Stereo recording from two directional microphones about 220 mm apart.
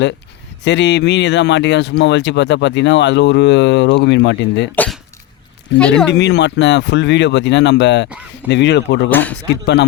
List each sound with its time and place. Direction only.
0.6 s speech: 55° left (ahead or behind)
4.7 s speech: 5° left (ahead or behind)
6.1 s speech: 50° left (ahead or behind)
9.0 s speech: 5° left (ahead or behind)